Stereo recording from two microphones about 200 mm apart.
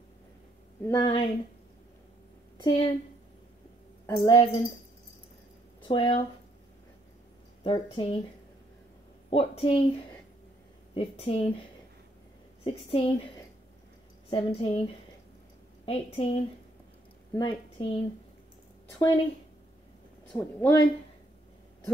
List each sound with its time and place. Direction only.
0.8 s a woman's voice: 20° left (ahead or behind)
2.5 s a sound: 25° left (ahead or behind)
4.0 s a woman's voice: 20° left (ahead or behind)
5.9 s a woman's voice: 30° left (ahead or behind)
7.6 s a woman's voice: 25° left (ahead or behind)
9.3 s a woman's voice: 30° left (ahead or behind)
11.0 s a woman's voice: 30° left (ahead or behind)
12.6 s a woman's voice: 30° left (ahead or behind)
14.3 s a woman's voice: 30° left (ahead or behind)
15.8 s a woman's voice: 30° left (ahead or behind)
18.9 s a woman's voice: 20° left (ahead or behind)
20.2 s speech: 5° left (ahead or behind)